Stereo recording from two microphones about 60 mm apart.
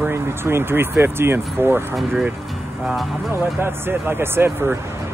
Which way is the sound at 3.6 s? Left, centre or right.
Right.